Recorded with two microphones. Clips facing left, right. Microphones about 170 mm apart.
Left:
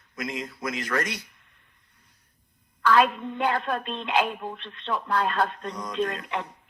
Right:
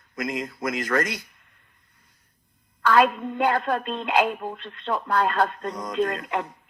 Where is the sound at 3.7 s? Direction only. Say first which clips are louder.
Right 3 dB; 45° right (ahead or behind).